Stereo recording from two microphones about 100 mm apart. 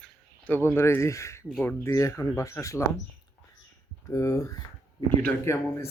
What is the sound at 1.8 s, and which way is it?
Speech, 30° left (ahead or behind).